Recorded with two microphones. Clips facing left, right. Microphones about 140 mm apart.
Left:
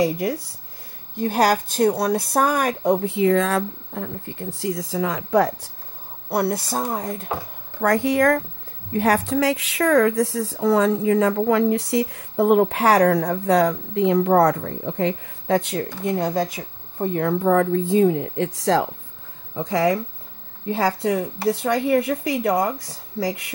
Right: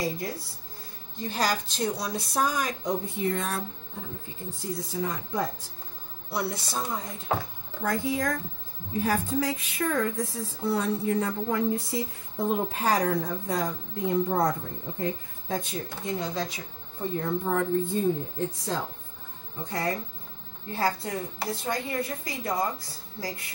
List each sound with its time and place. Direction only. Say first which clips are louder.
0.0 s speech: left 10 dB; 70° left (ahead or behind)
1.1 s speech: left 9 dB; 60° left (ahead or behind)
6.2 s speech: left 9 dB; 55° left (ahead or behind)
7.8 s speech: left 10 dB; 75° left (ahead or behind); by 17.1 s 50° left (ahead or behind)
17.1 s speech: left 9 dB; 80° left